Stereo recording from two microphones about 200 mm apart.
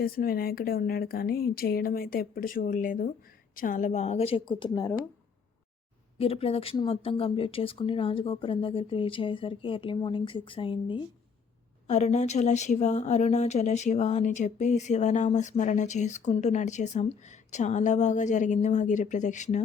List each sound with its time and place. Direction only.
0.0 s speech: 50° left (ahead or behind); by 4.9 s 20° left (ahead or behind)
6.1 s speech: 30° left (ahead or behind)
11.9 s speech: 35° left (ahead or behind)